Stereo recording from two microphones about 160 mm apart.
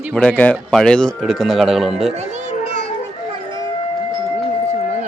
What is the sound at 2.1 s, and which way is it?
Speech, 45° right (ahead or behind).